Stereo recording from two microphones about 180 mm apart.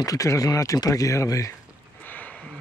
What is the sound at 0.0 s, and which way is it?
Speech, 20° left (ahead or behind).